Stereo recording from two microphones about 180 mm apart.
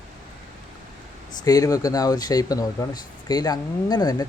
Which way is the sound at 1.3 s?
20° left (ahead or behind).